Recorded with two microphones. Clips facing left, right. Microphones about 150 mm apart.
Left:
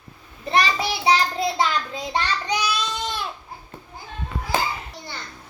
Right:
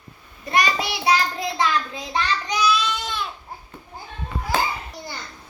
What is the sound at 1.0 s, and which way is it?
Child singing, 25° left (ahead or behind).